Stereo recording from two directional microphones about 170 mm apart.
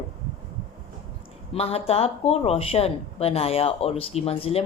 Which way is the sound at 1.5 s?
35° left (ahead or behind).